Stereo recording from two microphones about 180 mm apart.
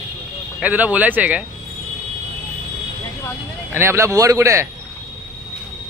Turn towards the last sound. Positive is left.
turn(degrees=-15)  # may be behind; listen again after turning